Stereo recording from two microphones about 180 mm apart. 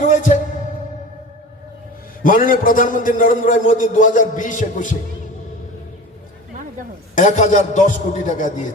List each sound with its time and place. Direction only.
0.0 s music: 45° left (ahead or behind)
2.2 s a man's voice: 50° left (ahead or behind)
7.2 s a man's voice: 45° left (ahead or behind)